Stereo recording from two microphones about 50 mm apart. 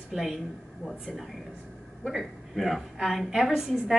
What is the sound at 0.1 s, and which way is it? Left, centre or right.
A woman's voice, centre.